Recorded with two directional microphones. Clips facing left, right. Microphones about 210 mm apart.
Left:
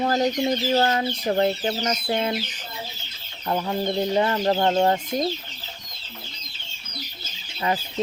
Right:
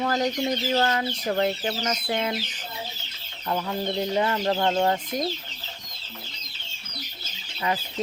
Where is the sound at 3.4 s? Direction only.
30° left (ahead or behind).